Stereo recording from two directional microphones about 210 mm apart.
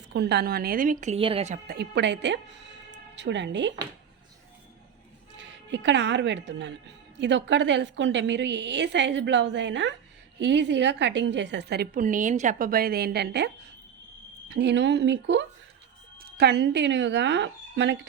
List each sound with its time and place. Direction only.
0.1 s a woman's voice: 50° right (ahead or behind); by 1.6 s 30° right (ahead or behind)
1.6 s speech: 50° right (ahead or behind)
5.4 s a woman's voice: 60° right (ahead or behind)
14.5 s a woman's voice: 55° right (ahead or behind)